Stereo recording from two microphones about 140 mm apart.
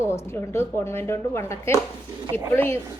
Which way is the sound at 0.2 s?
15° left (ahead or behind).